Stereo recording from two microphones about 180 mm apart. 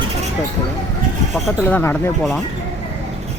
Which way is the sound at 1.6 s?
10° left (ahead or behind).